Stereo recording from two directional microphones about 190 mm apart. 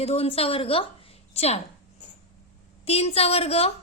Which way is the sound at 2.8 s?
30° left (ahead or behind).